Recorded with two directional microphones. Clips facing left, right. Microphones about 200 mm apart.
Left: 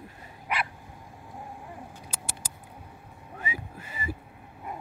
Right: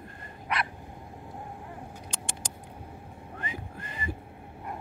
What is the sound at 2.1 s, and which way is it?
Patter, 5° left (ahead or behind).